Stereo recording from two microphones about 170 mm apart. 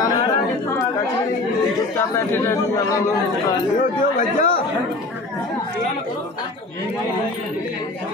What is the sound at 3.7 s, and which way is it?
Speech, 50° left (ahead or behind).